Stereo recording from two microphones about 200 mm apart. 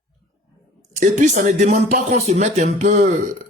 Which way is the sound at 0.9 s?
40° right (ahead or behind).